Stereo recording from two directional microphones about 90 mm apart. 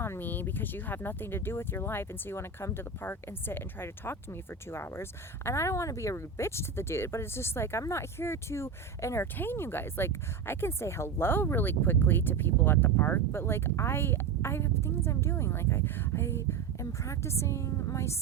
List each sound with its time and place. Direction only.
0.0 s speech: 25° left (ahead or behind)